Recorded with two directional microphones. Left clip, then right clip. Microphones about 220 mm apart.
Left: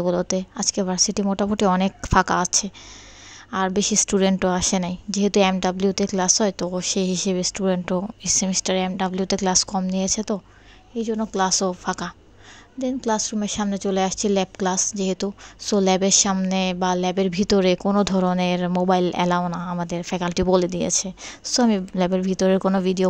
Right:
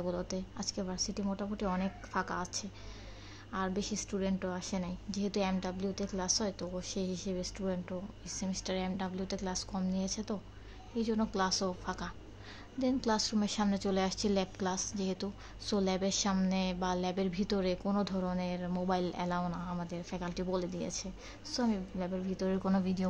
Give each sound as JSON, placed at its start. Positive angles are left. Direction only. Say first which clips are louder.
{"t": 0.0, "sound": "a woman's voice", "louder": "left 15 dB", "side_deg": 40}